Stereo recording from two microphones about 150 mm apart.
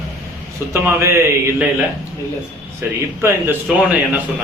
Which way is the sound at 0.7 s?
15° right (ahead or behind).